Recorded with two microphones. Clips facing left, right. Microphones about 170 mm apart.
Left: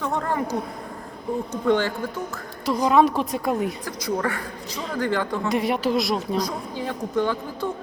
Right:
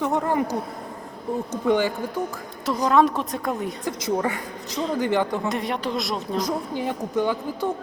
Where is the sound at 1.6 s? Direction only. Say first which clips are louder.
Even; 15° right (ahead or behind).